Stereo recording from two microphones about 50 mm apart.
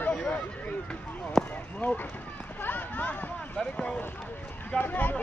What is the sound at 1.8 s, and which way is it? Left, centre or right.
Speech, left.